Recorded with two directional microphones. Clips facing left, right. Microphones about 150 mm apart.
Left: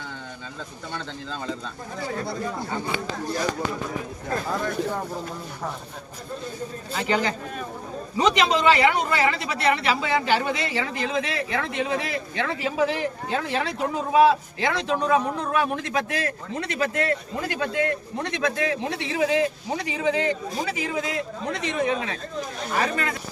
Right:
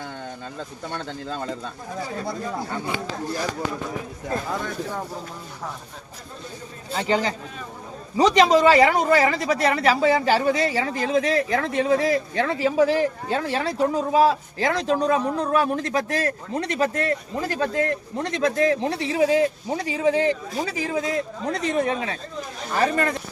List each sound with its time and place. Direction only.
4.5 s speech: centre (ahead or behind)
6.9 s a man's voice: 35° right (ahead or behind)